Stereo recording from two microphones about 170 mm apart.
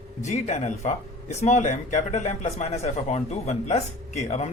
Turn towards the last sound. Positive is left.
turn(degrees=40)  # may be behind; listen again after turning